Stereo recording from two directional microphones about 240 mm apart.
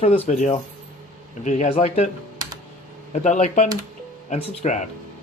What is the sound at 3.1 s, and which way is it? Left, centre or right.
A man's voice, left.